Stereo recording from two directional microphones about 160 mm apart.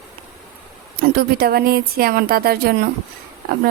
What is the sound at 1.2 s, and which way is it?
Speech, 70° right (ahead or behind).